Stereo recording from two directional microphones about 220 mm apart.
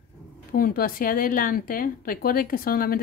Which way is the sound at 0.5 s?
40° left (ahead or behind).